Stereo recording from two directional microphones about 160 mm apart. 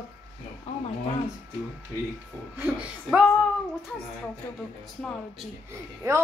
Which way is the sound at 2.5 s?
10° right (ahead or behind).